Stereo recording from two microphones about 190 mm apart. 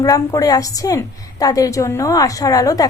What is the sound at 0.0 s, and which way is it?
A woman's voice, 20° left (ahead or behind).